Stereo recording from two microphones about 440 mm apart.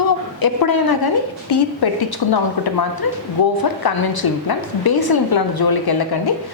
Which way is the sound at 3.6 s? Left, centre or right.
Left.